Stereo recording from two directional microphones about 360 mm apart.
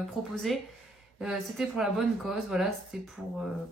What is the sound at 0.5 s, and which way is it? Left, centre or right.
A woman's voice, centre.